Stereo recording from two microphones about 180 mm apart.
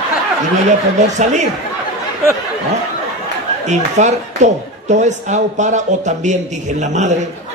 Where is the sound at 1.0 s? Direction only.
40° right (ahead or behind).